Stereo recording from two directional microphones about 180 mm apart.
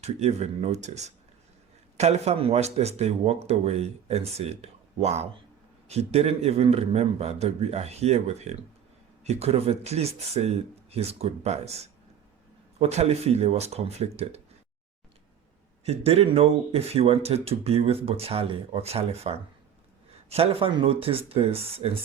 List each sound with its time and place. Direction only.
0.0 s a man's voice: 35° right (ahead or behind)
15.8 s a man's voice: 35° right (ahead or behind)